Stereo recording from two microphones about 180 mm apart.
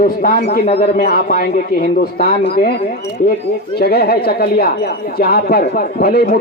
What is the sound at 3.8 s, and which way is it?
A man's voice, 60° left (ahead or behind).